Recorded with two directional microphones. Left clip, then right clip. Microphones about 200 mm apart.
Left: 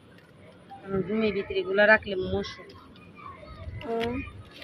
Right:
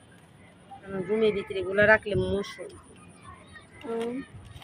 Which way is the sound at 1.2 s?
65° right (ahead or behind).